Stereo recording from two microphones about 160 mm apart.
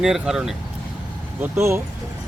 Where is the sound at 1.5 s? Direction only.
15° right (ahead or behind).